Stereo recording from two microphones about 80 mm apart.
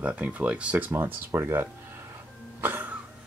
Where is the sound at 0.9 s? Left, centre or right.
Right.